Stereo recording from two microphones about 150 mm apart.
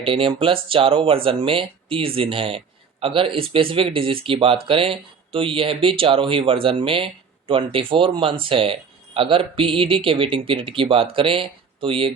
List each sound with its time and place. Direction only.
0.0 s speech: 35° right (ahead or behind)